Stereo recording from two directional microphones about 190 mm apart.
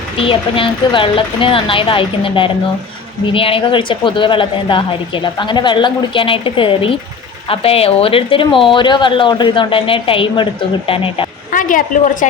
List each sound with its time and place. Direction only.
0.2 s speech: 30° left (ahead or behind)
11.5 s a woman's voice: 45° left (ahead or behind)